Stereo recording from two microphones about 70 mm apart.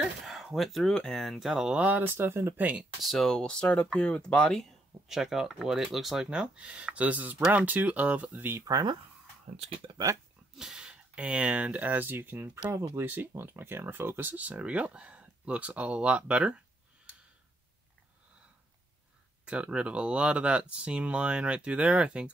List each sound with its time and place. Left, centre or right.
0.2 s speech: centre
1.5 s speech: centre
1.8 s speech: right
2.1 s speech: right
2.6 s speech: centre
3.0 s speech: centre
5.1 s speech: centre
6.4 s speech: centre
10.6 s speech: centre
19.4 s speech: centre